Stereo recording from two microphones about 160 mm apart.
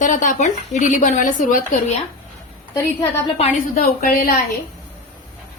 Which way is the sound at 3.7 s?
65° left (ahead or behind).